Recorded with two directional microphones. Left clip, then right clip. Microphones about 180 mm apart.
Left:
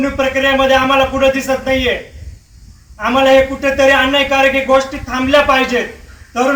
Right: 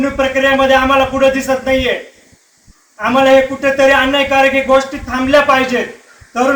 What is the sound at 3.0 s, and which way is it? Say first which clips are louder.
A man's voice: right 1 dB; 5° right (ahead or behind).